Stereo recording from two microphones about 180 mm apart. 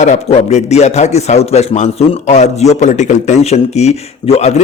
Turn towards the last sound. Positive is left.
turn(degrees=35)  # may be behind; listen again after turning